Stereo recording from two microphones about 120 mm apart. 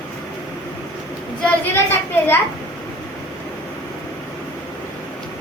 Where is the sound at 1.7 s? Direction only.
20° left (ahead or behind).